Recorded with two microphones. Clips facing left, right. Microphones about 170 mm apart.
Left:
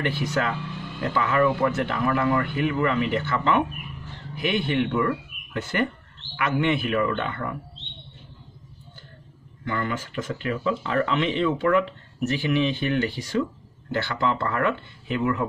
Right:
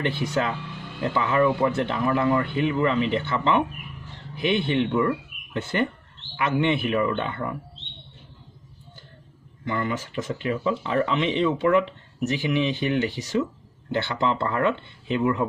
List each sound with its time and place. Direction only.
0.0 s speech: 25° right (ahead or behind)
9.7 s speech: 15° right (ahead or behind)